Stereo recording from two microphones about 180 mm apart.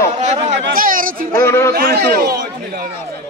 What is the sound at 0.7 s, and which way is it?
Speech, 50° right (ahead or behind).